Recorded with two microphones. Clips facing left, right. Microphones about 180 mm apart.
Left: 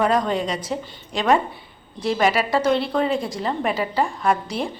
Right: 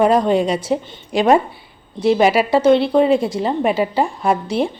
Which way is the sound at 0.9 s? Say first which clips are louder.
Right 5 dB; 25° right (ahead or behind).